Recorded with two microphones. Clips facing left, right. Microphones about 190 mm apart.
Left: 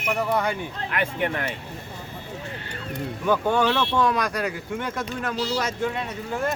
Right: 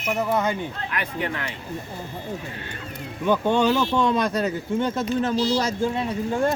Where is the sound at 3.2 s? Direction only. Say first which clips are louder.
Right 2 dB; 20° right (ahead or behind).